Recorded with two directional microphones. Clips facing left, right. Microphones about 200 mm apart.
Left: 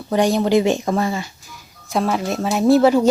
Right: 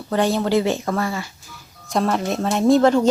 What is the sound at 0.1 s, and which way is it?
Speech, 15° left (ahead or behind).